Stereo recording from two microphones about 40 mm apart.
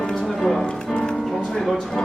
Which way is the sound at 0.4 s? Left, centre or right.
Centre.